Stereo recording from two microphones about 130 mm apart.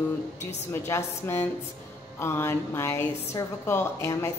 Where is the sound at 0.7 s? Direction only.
20° left (ahead or behind).